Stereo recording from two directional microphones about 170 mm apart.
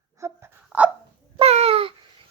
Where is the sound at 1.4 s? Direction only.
35° right (ahead or behind).